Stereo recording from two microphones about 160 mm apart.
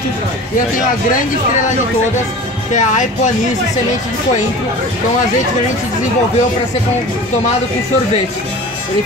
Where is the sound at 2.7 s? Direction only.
50° left (ahead or behind).